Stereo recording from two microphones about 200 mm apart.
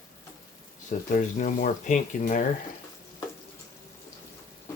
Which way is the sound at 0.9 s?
40° left (ahead or behind).